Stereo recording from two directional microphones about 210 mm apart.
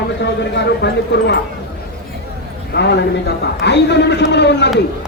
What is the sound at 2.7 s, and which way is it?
A man's voice, 50° left (ahead or behind).